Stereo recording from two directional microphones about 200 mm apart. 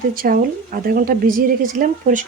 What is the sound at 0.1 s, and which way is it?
A woman's voice, 45° right (ahead or behind).